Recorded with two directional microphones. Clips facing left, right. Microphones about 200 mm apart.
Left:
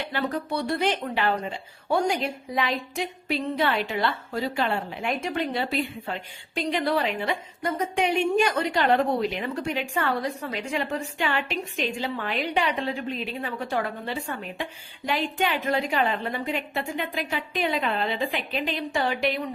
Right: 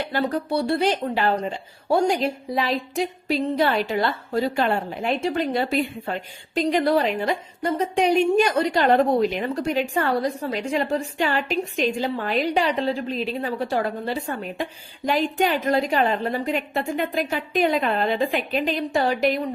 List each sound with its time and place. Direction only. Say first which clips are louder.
0.0 s a woman's voice: right 4 dB; 40° right (ahead or behind)
5.1 s a woman's voice: right 5 dB; 35° right (ahead or behind)